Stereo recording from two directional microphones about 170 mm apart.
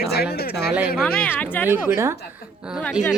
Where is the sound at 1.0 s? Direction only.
10° left (ahead or behind).